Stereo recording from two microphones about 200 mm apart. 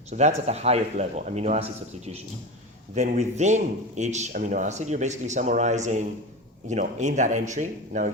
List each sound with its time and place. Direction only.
0.1 s speech: 35° right (ahead or behind)
2.9 s speech: 35° right (ahead or behind)